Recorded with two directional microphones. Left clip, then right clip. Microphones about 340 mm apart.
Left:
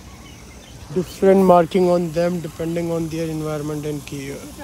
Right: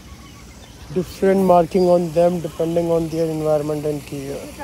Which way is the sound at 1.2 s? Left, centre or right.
Centre.